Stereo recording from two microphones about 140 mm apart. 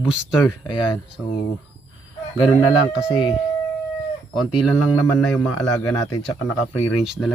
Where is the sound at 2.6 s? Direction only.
5° right (ahead or behind).